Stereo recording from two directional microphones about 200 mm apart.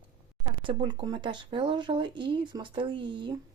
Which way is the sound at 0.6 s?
25° right (ahead or behind).